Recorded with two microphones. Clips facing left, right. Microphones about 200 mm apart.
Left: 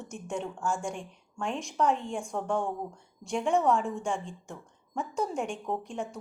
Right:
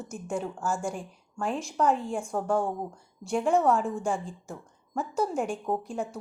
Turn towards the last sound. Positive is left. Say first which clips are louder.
# right 3 dB
turn(degrees=-5)  # may be behind; listen again after turning